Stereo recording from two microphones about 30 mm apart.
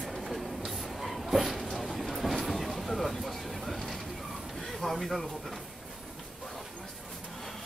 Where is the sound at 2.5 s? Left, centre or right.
Centre.